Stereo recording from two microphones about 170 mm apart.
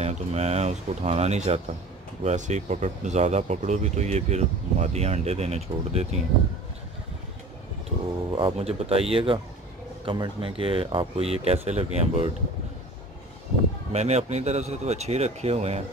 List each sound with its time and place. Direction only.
0.0 s speech: 40° right (ahead or behind)
8.3 s speech: 30° right (ahead or behind)
13.9 s speech: 40° right (ahead or behind)